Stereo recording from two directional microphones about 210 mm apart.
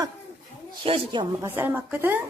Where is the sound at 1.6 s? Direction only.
10° right (ahead or behind).